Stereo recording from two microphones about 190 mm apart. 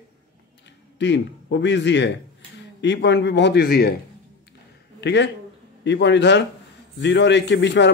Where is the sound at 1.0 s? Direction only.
70° left (ahead or behind).